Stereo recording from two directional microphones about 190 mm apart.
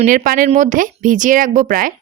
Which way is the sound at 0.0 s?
45° right (ahead or behind).